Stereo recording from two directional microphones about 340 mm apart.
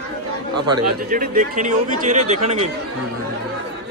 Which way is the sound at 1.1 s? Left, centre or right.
Right.